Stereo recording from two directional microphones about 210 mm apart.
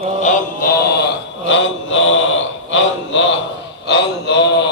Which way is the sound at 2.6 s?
60° left (ahead or behind).